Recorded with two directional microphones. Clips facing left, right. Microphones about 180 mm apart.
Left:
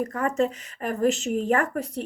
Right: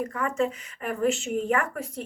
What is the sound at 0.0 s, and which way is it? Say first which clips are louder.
Speech: left 2 dB; 40° left (ahead or behind).